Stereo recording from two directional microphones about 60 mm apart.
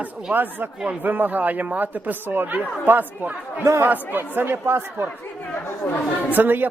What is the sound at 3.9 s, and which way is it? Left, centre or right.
A man's voice, right.